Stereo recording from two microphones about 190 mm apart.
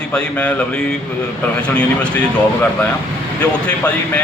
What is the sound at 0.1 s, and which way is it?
A man's voice, 5° left (ahead or behind).